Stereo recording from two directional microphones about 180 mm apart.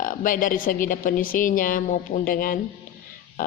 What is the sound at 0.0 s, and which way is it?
A woman's voice, 50° left (ahead or behind).